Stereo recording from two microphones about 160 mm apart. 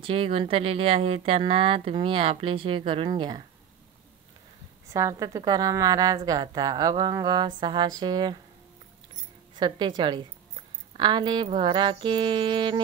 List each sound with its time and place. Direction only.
0.0 s speech: 35° right (ahead or behind)
4.9 s a woman's voice: 20° right (ahead or behind)
9.6 s a woman's voice: 30° right (ahead or behind)